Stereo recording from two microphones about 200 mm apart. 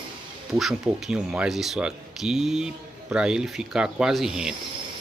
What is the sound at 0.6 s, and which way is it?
Speech, centre (ahead or behind).